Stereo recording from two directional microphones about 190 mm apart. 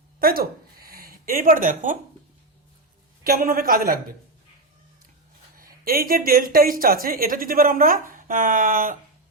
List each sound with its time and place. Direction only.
0.2 s a sound: 50° right (ahead or behind)
3.2 s speech: 50° right (ahead or behind)
5.5 s speech: 50° right (ahead or behind)